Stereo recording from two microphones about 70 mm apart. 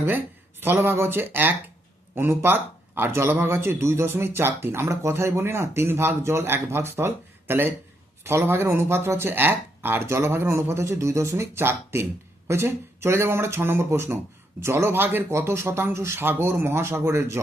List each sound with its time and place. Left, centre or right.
0.6 s a man's voice: right